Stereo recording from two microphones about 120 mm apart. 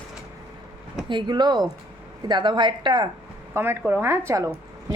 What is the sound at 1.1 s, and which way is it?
A woman's voice, 40° right (ahead or behind).